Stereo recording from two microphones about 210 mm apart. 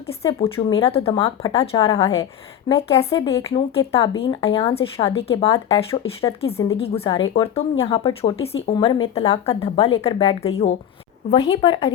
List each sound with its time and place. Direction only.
0.2 s speech: 20° left (ahead or behind)
1.2 s speech: 15° left (ahead or behind)
6.7 s speech: 30° left (ahead or behind)